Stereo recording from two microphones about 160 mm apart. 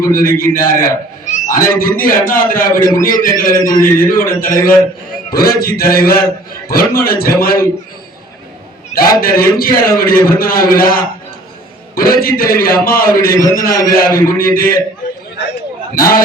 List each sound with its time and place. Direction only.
0.0 s a man's voice: 60° left (ahead or behind)
9.0 s a man's voice: 65° left (ahead or behind)
16.0 s a man's voice: 65° left (ahead or behind)